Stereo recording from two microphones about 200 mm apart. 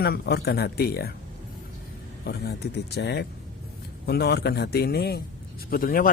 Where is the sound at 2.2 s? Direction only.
55° left (ahead or behind).